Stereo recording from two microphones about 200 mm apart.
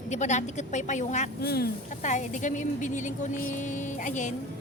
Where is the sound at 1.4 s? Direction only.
50° left (ahead or behind).